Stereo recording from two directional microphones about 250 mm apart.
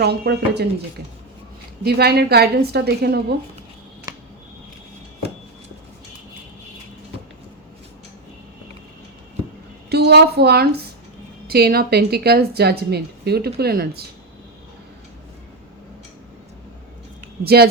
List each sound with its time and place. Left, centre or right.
0.0 s a woman's voice: right
1.8 s a woman's voice: right
4.1 s finger snapping: centre
9.9 s a woman's voice: right
17.4 s a woman's voice: right